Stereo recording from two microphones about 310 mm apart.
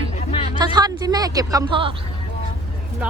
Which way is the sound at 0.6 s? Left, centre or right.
Centre.